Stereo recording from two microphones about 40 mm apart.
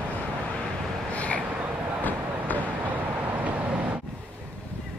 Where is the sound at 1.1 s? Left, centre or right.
Left.